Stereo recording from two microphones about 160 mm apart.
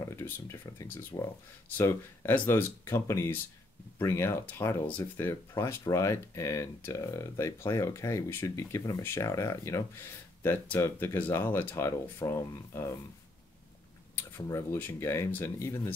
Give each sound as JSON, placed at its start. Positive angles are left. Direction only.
{"t": 0.0, "sound": "speech", "side_deg": 15}
{"t": 14.1, "sound": "speech", "side_deg": 15}